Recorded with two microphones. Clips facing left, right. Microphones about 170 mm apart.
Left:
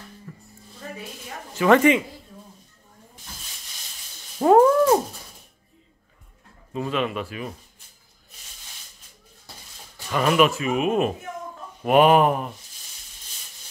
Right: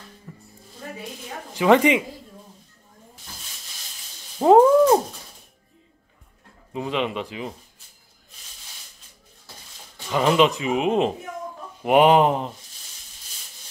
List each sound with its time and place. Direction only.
0.3 s music: 15° right (ahead or behind)
1.5 s speech: 15° right (ahead or behind)
4.4 s a sound: 10° right (ahead or behind)
6.7 s speech: 15° right (ahead or behind)
10.1 s speech: 20° right (ahead or behind)